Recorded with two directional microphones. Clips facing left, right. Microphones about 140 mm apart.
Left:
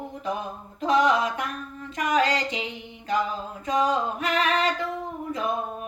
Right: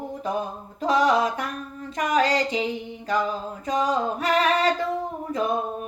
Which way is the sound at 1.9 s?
35° right (ahead or behind).